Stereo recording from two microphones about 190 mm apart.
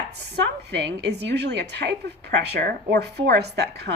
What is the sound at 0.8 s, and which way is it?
A woman's voice, 60° right (ahead or behind).